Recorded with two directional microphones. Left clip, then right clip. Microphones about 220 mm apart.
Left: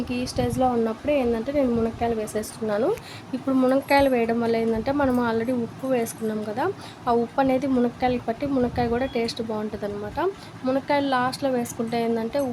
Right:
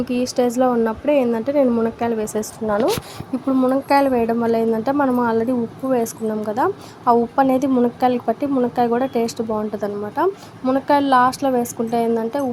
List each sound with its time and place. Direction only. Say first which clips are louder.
0.1 s a woman's voice: right 8 dB; 20° right (ahead or behind)
2.4 s speech: right 6 dB; centre (ahead or behind)
6.6 s a woman's voice: right 6 dB; 10° right (ahead or behind)